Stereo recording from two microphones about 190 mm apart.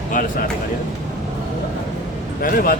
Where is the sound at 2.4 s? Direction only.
50° left (ahead or behind).